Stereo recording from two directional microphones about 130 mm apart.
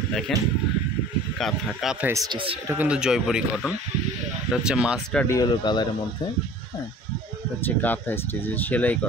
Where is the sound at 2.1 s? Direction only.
25° right (ahead or behind).